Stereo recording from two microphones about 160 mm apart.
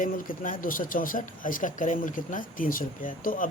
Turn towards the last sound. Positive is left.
turn(degrees=60)  # may be behind; listen again after turning